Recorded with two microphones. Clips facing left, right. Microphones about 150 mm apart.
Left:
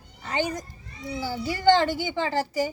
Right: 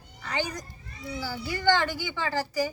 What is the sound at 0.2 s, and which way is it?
A child's voice, 25° left (ahead or behind).